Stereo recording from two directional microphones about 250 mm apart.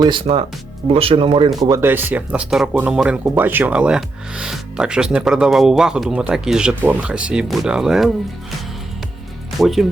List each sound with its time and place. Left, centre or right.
0.0 s speech: centre
9.6 s speech: centre